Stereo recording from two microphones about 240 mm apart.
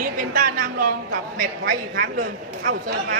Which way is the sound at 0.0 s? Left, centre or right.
Right.